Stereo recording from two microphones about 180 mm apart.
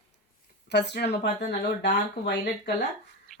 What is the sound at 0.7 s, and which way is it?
Speech, 70° left (ahead or behind).